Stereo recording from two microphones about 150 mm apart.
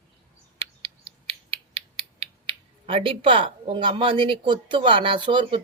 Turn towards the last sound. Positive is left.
turn(degrees=-35)  # may be behind; listen again after turning